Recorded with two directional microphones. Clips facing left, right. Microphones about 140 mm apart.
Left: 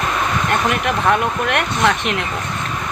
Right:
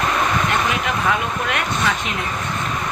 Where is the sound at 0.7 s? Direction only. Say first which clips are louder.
Left 4 dB; 60° left (ahead or behind).